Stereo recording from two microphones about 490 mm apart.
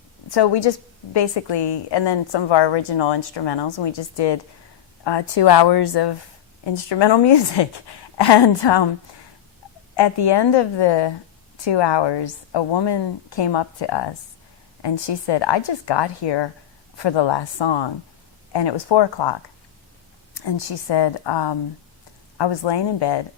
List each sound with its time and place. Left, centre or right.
0.3 s a woman's voice: left
9.9 s a woman's voice: left
20.3 s a woman's voice: left